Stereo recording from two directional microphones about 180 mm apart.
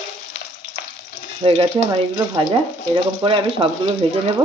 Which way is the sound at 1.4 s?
20° right (ahead or behind).